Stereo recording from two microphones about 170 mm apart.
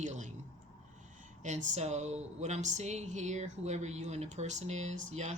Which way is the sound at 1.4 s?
45° right (ahead or behind).